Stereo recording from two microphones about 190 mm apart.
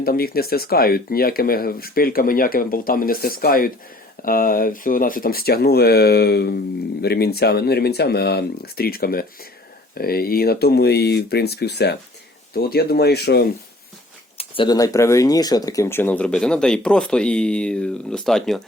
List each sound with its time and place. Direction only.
0.0 s speech: 55° left (ahead or behind)
14.3 s speech: 25° left (ahead or behind); by 18.6 s centre (ahead or behind)